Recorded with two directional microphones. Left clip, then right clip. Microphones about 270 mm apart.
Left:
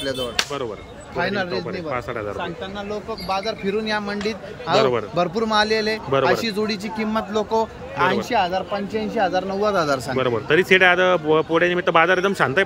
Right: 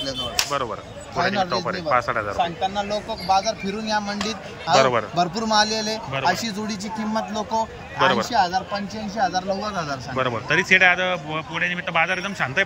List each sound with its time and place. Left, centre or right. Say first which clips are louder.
0.0 s a man's voice: left 2 dB; centre
3.3 s a man's voice: right 3 dB; centre